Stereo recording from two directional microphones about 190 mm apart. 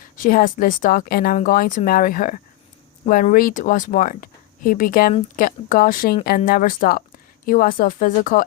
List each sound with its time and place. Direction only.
0.2 s speech: 45° left (ahead or behind)